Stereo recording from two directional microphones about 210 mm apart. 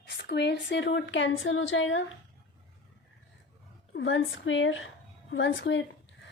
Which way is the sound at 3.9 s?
65° left (ahead or behind).